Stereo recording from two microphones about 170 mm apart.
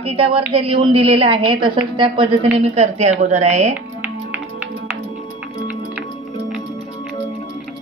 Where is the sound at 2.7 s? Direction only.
40° right (ahead or behind).